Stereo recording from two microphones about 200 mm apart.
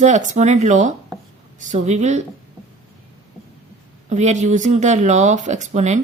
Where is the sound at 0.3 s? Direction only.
35° right (ahead or behind).